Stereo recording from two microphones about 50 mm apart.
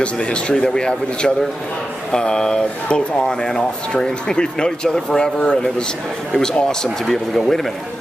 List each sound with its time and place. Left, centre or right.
0.0 s speech: left; by 7.7 s centre